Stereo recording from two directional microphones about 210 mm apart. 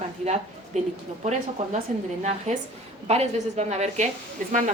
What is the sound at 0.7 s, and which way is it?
Speech, 35° right (ahead or behind).